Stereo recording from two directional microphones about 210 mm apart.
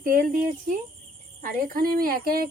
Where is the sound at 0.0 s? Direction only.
45° right (ahead or behind).